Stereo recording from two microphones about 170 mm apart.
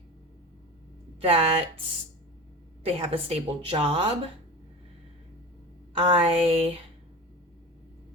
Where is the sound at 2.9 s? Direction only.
35° right (ahead or behind).